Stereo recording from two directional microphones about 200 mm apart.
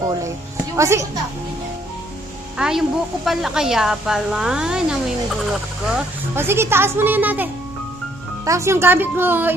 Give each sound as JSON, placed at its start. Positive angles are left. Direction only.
{"t": 0.0, "sound": "a woman's voice", "side_deg": -15}
{"t": 2.5, "sound": "a woman's voice", "side_deg": -5}
{"t": 8.5, "sound": "a woman's voice", "side_deg": -15}